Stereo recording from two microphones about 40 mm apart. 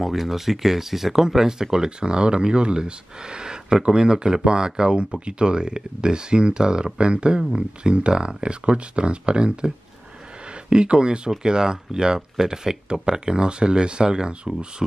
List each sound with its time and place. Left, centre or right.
0.0 s speech: centre; by 9.7 s right
10.7 s speech: right